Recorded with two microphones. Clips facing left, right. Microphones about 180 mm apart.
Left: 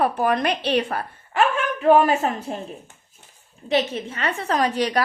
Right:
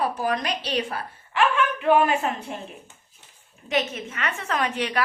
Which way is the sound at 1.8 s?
40° left (ahead or behind).